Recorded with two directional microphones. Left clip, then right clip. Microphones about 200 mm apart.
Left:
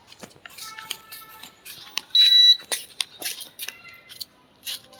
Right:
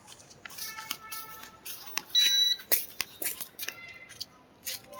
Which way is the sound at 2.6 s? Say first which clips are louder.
Left 5 dB; 20° right (ahead or behind).